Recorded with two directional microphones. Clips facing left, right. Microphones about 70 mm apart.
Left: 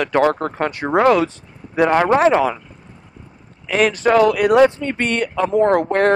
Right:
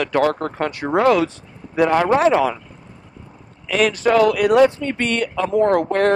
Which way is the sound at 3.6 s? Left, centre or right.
Left.